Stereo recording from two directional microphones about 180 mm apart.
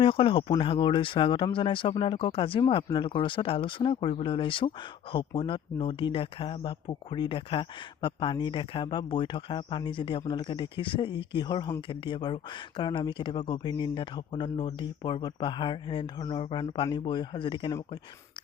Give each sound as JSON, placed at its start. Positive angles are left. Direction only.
{"t": 0.0, "sound": "speech", "side_deg": 30}